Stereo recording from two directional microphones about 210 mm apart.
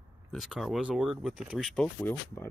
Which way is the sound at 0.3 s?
Centre (ahead or behind).